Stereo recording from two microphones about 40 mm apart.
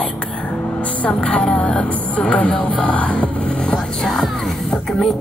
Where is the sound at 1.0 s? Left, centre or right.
Left.